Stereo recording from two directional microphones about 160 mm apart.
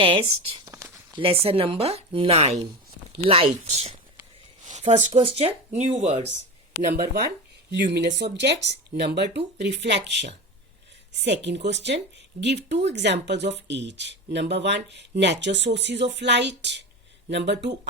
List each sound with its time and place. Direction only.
0.0 s speech: 35° right (ahead or behind)
0.6 s a sound: 15° right (ahead or behind)
1.1 s speech: 35° right (ahead or behind)
6.8 s speech: 65° right (ahead or behind)
7.9 s speech: 90° right